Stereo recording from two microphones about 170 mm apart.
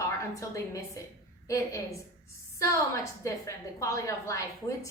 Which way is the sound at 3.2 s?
20° left (ahead or behind).